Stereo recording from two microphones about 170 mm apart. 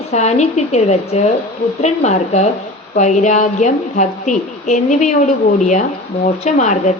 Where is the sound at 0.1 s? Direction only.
40° left (ahead or behind).